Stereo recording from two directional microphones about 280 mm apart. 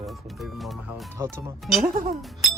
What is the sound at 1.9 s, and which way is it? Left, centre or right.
Speech, right.